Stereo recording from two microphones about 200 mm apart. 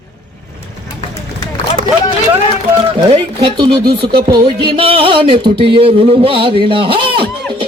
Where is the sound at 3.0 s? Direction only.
25° right (ahead or behind).